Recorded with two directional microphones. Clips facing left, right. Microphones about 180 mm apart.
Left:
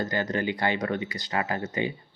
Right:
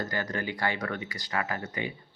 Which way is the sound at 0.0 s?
20° left (ahead or behind).